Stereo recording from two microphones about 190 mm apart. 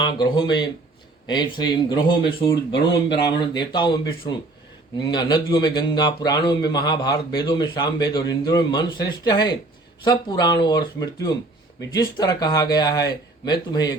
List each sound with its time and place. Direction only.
0.0 s speech: 20° left (ahead or behind)
2.9 s speech: 60° left (ahead or behind)
3.3 s speech: 25° left (ahead or behind)